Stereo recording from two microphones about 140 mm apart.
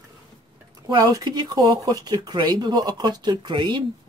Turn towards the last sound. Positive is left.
turn(degrees=-35)  # may be behind; listen again after turning